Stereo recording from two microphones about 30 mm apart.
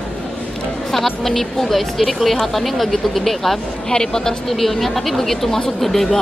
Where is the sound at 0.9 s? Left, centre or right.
Centre.